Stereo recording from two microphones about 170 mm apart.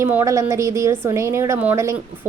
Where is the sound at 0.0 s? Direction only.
15° right (ahead or behind).